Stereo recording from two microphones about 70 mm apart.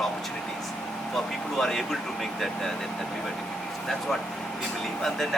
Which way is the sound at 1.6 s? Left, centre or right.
Centre.